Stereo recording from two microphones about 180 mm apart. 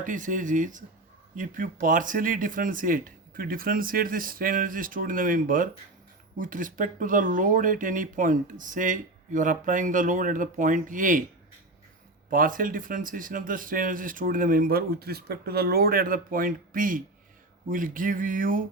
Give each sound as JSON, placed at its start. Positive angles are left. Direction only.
{"t": 0.0, "sound": "speech", "side_deg": -45}
{"t": 12.3, "sound": "speech", "side_deg": -50}